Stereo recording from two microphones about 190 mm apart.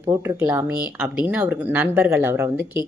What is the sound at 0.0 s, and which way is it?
Speech, 15° right (ahead or behind).